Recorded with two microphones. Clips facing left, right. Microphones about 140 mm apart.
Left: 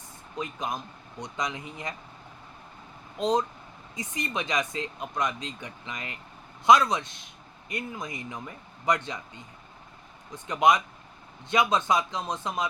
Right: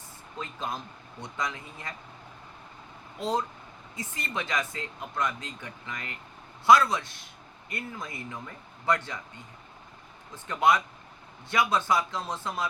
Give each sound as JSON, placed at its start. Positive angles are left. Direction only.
{"t": 0.3, "sound": "a man's voice", "side_deg": 15}
{"t": 3.2, "sound": "a man's voice", "side_deg": 20}
{"t": 10.3, "sound": "a man's voice", "side_deg": 15}